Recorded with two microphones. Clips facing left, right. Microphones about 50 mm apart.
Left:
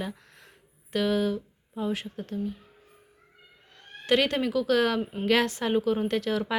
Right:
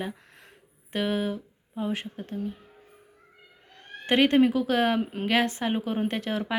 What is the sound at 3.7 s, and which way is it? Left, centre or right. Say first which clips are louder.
A woman's voice: right 1 dB; right.